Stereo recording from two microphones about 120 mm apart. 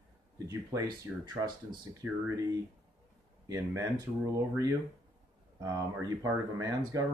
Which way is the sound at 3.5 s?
30° right (ahead or behind).